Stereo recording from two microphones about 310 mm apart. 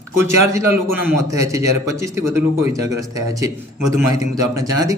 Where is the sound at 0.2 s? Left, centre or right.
Centre.